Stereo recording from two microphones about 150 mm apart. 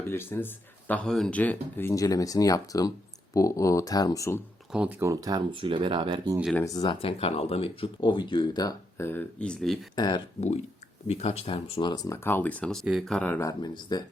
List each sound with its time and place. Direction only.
0.1 s speech: 15° left (ahead or behind)
4.7 s speech: 5° right (ahead or behind)
4.9 s speech: 20° right (ahead or behind)
6.7 s speech: 30° left (ahead or behind)
7.1 s speech: 40° left (ahead or behind); by 9.7 s 5° left (ahead or behind)
9.9 s speech: 30° left (ahead or behind)
11.0 s speech: 45° left (ahead or behind)
12.0 s speech: 15° left (ahead or behind)